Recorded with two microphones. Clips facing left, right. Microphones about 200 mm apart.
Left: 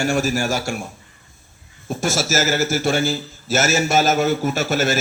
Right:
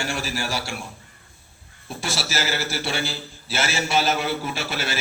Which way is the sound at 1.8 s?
45° left (ahead or behind).